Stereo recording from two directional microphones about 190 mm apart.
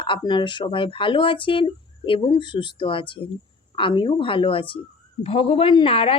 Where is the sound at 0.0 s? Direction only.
25° left (ahead or behind).